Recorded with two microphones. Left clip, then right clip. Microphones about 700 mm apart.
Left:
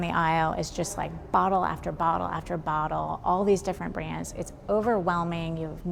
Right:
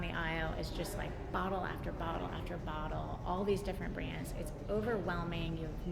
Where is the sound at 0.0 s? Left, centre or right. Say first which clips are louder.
Left 14 dB; left.